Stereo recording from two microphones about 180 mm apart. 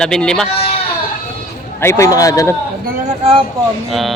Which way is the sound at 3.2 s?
30° right (ahead or behind).